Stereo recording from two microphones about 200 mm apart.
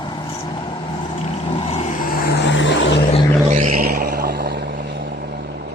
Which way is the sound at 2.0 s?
45° left (ahead or behind).